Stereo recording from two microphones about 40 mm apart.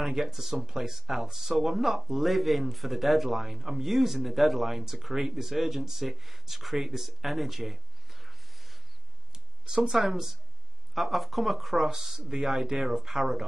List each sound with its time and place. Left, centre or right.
0.0 s speech: centre
9.3 s a sound: centre
9.8 s speech: centre